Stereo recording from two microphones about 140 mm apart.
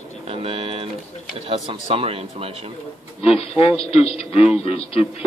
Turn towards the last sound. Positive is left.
turn(degrees=45)  # may be behind; listen again after turning